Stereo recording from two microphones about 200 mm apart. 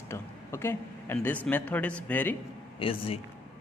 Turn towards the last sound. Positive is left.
turn(degrees=25)  # may be behind; listen again after turning